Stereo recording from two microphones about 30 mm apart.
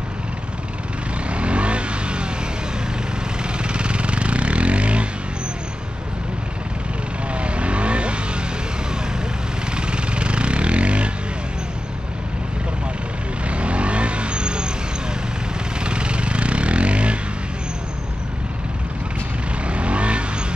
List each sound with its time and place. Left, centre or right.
1.3 s vehicle: right
3.5 s vehicle: right
7.3 s vehicle: right
9.8 s vehicle: right
13.5 s vehicle: right
15.8 s vehicle: right
19.6 s vehicle: right